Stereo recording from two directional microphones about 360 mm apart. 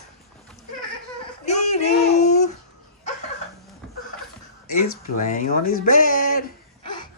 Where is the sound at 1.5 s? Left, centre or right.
Centre.